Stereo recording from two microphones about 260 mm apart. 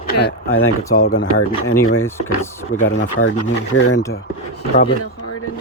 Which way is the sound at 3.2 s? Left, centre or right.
Left.